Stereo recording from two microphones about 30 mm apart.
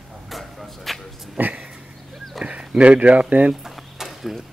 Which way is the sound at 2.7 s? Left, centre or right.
Right.